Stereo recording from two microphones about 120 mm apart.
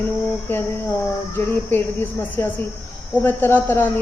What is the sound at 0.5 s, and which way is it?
A woman's voice, 20° left (ahead or behind).